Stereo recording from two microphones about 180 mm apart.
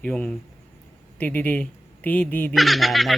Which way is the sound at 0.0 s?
5° left (ahead or behind).